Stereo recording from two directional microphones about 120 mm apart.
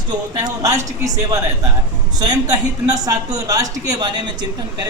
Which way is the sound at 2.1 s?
35° right (ahead or behind).